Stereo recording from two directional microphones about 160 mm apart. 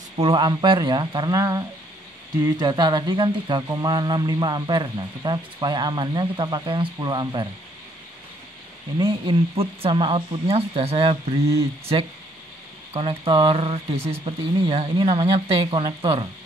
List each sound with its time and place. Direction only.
0.2 s speech: 30° right (ahead or behind)
8.9 s speech: 30° right (ahead or behind)